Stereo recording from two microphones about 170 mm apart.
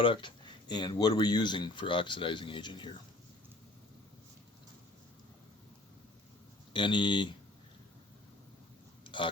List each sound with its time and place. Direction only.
0.0 s speech: 30° left (ahead or behind)
6.7 s speech: 30° left (ahead or behind)
9.0 s a sound: 30° left (ahead or behind)